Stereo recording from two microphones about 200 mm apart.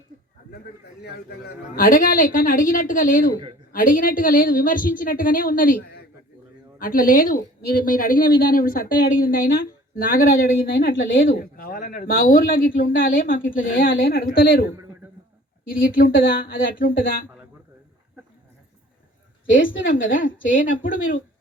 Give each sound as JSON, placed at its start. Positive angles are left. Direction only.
{"t": 1.0, "sound": "speech", "side_deg": 50}
{"t": 19.9, "sound": "speech", "side_deg": 45}